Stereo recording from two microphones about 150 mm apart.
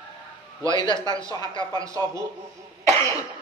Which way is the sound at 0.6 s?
30° left (ahead or behind).